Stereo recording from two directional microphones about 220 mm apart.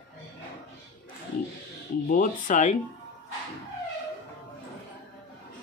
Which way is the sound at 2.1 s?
35° left (ahead or behind).